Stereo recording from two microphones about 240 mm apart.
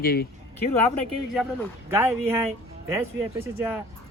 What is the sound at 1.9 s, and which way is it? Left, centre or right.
Speech, centre.